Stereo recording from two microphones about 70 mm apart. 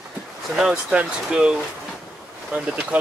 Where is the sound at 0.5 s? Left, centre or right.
Centre.